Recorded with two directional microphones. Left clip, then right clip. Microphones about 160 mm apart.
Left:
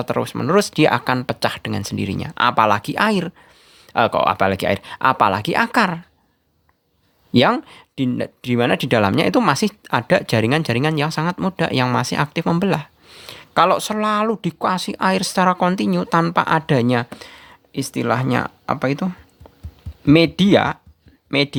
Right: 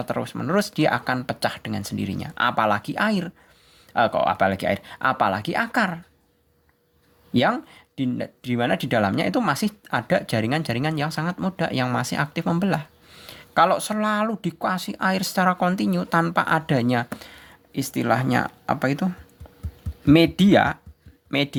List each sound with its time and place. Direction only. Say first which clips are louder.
0.0 s speech: left 6 dB; 35° left (ahead or behind)
7.3 s speech: left 6 dB; 40° left (ahead or behind)